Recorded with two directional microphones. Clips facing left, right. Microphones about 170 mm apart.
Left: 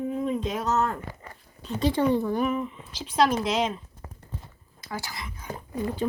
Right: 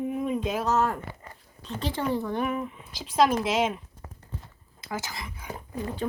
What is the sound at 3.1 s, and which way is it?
Speech, 10° right (ahead or behind).